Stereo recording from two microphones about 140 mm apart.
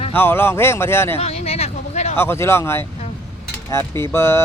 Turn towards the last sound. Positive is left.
turn(degrees=20)  # may be behind; listen again after turning